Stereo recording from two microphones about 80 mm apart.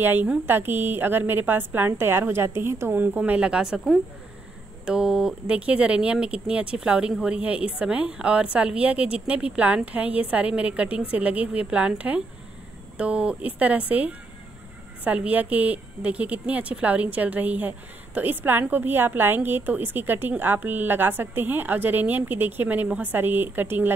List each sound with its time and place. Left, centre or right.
0.0 s a woman's voice: right